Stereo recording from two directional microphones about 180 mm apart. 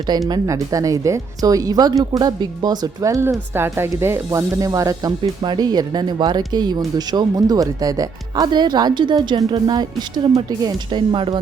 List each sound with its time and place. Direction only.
0.3 s a woman's voice: 20° right (ahead or behind)